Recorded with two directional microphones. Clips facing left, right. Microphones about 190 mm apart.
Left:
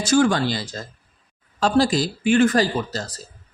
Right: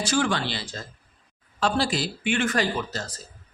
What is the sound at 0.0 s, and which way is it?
Speech, 45° left (ahead or behind).